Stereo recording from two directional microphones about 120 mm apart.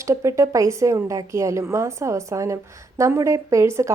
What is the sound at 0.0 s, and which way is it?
A woman's voice, 25° right (ahead or behind).